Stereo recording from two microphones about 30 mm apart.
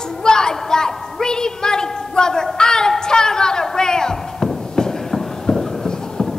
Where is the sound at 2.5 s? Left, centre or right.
Left.